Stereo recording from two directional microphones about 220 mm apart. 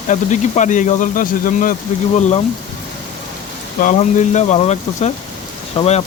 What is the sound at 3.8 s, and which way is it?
Speech, 35° left (ahead or behind).